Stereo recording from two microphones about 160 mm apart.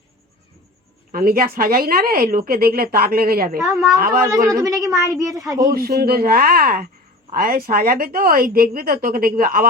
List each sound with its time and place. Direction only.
1.1 s a woman's voice: 65° right (ahead or behind)
3.6 s a woman's voice: centre (ahead or behind)
4.3 s speech: 20° right (ahead or behind)
5.7 s a woman's voice: 70° right (ahead or behind)